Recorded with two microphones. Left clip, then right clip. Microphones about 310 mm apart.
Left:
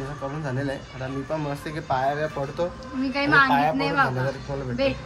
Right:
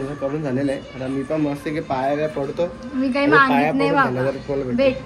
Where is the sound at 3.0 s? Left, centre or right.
Centre.